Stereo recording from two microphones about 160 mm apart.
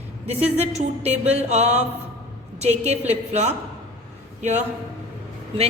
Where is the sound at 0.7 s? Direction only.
40° right (ahead or behind).